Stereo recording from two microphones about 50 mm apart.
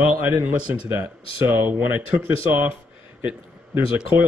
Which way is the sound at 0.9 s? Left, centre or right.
Right.